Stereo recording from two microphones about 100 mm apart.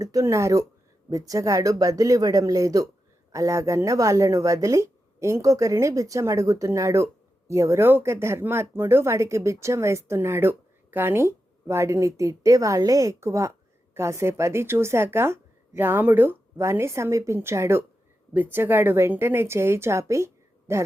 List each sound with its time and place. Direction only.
0.0 s speech: 35° right (ahead or behind)